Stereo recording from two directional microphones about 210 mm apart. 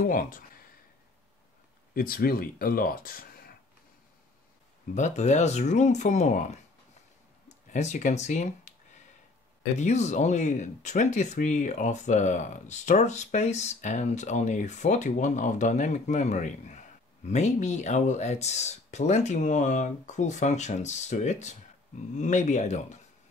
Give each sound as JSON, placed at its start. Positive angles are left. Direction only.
{"t": 0.0, "sound": "speech", "side_deg": 40}
{"t": 2.0, "sound": "speech", "side_deg": 45}
{"t": 4.9, "sound": "speech", "side_deg": 35}
{"t": 7.4, "sound": "a sound", "side_deg": 35}
{"t": 9.8, "sound": "speech", "side_deg": 35}